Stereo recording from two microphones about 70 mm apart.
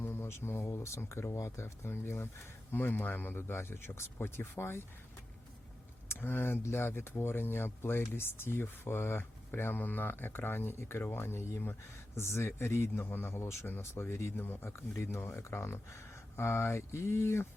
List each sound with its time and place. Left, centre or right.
0.0 s a sound: left
0.7 s speech: left
6.1 s speech: left